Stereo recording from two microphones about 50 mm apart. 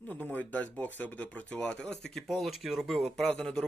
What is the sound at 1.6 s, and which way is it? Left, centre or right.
Speech, centre.